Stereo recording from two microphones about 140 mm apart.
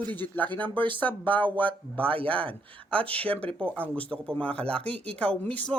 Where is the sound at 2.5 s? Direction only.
10° left (ahead or behind).